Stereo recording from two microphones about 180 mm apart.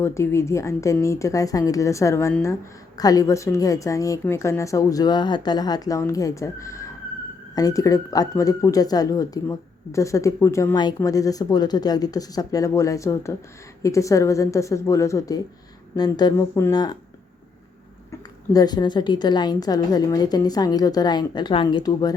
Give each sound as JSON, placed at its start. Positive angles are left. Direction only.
{"t": 0.0, "sound": "a woman's voice", "side_deg": 15}
{"t": 18.5, "sound": "speech", "side_deg": 20}